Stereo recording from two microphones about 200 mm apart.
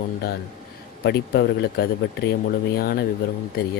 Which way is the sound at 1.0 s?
55° left (ahead or behind).